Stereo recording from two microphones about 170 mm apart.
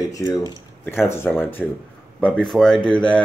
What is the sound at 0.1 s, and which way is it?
A man's voice, 20° left (ahead or behind).